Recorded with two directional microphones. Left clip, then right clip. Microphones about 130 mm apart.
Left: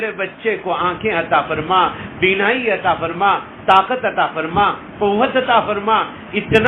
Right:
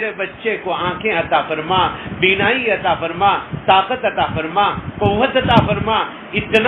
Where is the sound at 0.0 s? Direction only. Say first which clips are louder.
Even; 40° left (ahead or behind).